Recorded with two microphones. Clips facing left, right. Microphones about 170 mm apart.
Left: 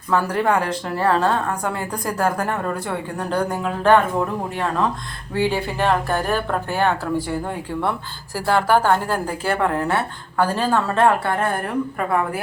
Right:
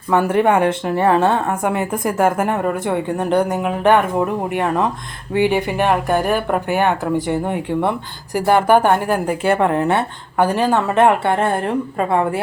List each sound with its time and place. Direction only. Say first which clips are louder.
0.1 s speech: right 4 dB; 20° right (ahead or behind)